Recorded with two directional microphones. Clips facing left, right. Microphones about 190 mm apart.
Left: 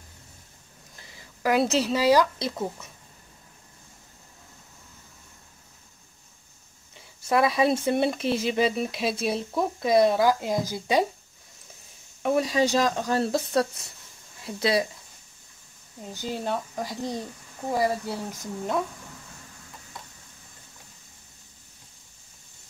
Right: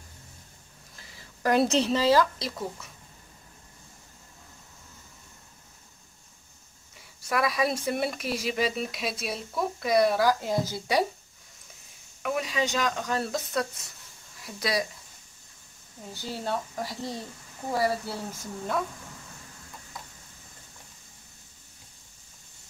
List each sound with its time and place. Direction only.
0.9 s a sound: 20° left (ahead or behind)
1.4 s speech: 5° left (ahead or behind)
7.2 s speech: 25° left (ahead or behind)
12.2 s speech: 35° left (ahead or behind)
16.0 s speech: 15° left (ahead or behind)